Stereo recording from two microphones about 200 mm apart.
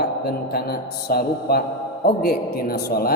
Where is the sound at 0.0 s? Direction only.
50° left (ahead or behind).